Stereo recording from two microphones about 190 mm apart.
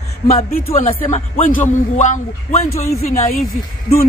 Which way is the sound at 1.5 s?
40° left (ahead or behind).